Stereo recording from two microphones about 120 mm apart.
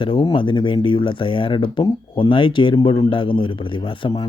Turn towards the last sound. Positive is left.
turn(degrees=45)  # may be behind; listen again after turning